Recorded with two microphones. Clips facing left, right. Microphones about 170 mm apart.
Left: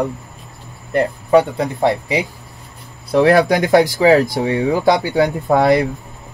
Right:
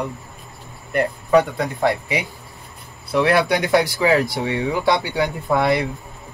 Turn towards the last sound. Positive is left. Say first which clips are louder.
# left 5 dB
turn(degrees=40)  # may be behind; listen again after turning